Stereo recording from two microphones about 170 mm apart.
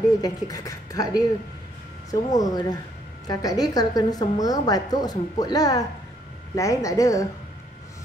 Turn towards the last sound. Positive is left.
turn(degrees=20)  # may be behind; listen again after turning